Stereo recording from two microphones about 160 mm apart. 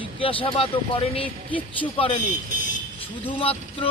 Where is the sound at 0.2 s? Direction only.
35° left (ahead or behind).